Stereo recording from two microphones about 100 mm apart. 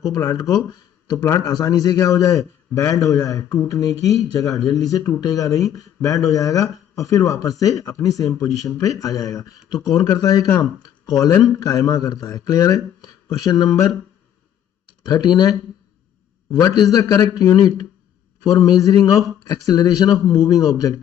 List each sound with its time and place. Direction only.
0.0 s speech: 35° left (ahead or behind)
15.0 s speech: 40° left (ahead or behind)
16.5 s speech: 35° left (ahead or behind)